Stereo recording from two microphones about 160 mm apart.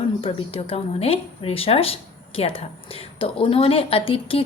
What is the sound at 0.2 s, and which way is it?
A woman's voice, 35° left (ahead or behind).